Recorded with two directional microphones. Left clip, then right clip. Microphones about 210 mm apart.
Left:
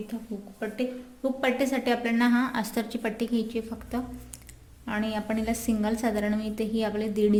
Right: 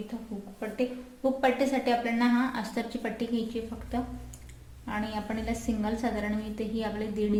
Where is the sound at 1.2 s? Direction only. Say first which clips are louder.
Even; 55° left (ahead or behind).